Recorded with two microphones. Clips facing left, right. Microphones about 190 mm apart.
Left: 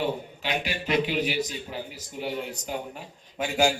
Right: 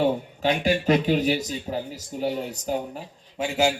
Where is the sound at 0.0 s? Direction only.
45° right (ahead or behind).